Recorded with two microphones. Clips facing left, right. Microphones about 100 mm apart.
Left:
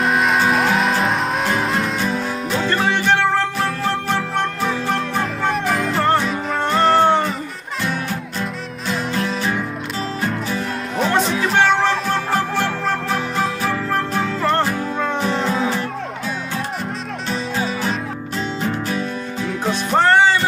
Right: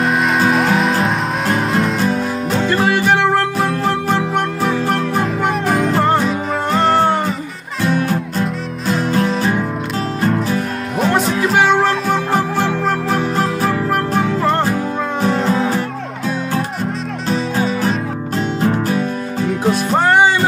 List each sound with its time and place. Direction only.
0.0 s music: centre (ahead or behind)
7.9 s music: 40° right (ahead or behind)
11.0 s music: 5° right (ahead or behind)
12.3 s music: 15° right (ahead or behind)
15.4 s music: centre (ahead or behind)
17.3 s music: 40° right (ahead or behind)
19.9 s music: 10° right (ahead or behind)